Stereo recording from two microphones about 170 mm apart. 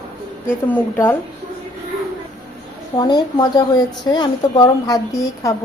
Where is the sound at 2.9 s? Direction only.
25° left (ahead or behind).